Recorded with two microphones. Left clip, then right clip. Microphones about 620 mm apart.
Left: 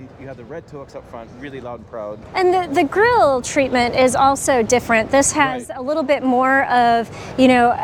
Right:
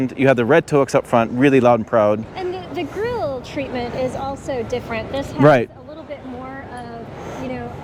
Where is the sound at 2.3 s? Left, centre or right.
Left.